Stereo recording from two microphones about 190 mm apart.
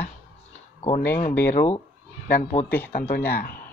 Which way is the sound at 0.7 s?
35° left (ahead or behind).